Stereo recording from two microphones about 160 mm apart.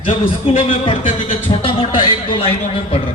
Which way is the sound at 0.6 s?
35° left (ahead or behind).